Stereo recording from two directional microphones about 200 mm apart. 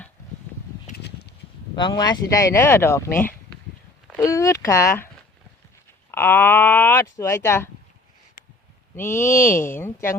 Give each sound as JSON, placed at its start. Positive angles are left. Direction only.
{"t": 1.7, "sound": "speech", "side_deg": 20}
{"t": 6.1, "sound": "speech", "side_deg": 10}
{"t": 9.0, "sound": "speech", "side_deg": 15}